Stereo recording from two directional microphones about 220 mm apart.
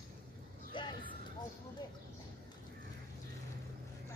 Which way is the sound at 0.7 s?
20° left (ahead or behind).